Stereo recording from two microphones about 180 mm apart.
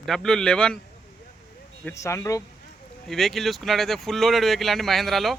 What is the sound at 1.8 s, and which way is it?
Speech, 15° left (ahead or behind).